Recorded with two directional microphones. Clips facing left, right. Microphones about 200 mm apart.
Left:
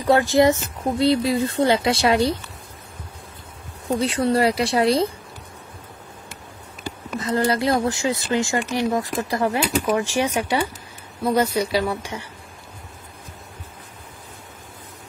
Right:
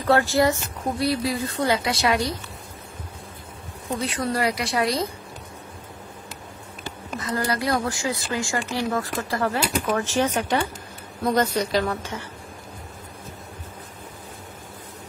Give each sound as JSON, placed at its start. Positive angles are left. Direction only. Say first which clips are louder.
{"t": 0.0, "sound": "speech", "louder": "left 3 dB", "side_deg": 15}
{"t": 4.0, "sound": "speech", "louder": "left 5 dB", "side_deg": 30}
{"t": 7.2, "sound": "speech", "louder": "left 5 dB", "side_deg": 25}